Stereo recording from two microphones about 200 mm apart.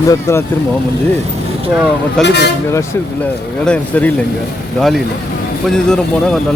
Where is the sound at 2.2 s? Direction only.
55° left (ahead or behind).